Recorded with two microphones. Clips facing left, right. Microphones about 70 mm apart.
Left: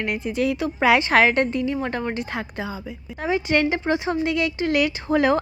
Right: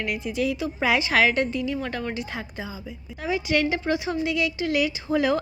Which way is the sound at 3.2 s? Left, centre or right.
Left.